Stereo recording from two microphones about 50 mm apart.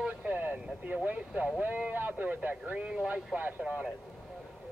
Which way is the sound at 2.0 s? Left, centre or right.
Right.